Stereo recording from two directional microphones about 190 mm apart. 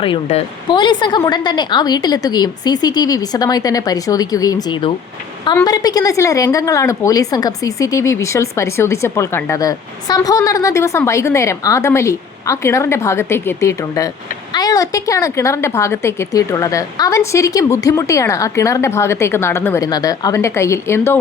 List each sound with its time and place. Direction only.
0.0 s a woman's voice: 30° left (ahead or behind); by 21.2 s 10° left (ahead or behind)